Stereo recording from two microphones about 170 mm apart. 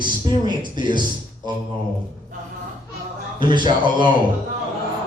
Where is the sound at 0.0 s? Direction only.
25° right (ahead or behind).